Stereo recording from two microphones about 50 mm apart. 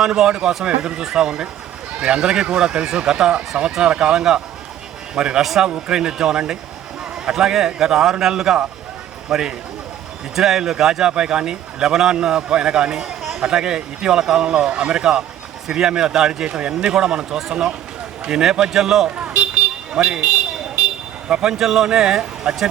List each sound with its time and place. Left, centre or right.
0.0 s speech: centre
19.0 s speech: right
19.9 s vehicle: right
21.2 s speech: centre
21.5 s speech: centre